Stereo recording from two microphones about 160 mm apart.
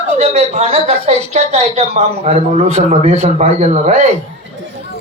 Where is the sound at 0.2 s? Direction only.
45° right (ahead or behind).